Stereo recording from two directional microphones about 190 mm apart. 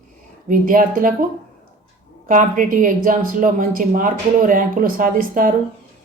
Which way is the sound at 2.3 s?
45° right (ahead or behind).